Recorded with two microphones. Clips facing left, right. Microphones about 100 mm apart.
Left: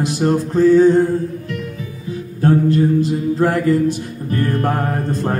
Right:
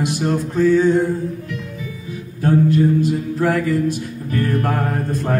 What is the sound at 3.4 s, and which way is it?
Mantra, 35° left (ahead or behind).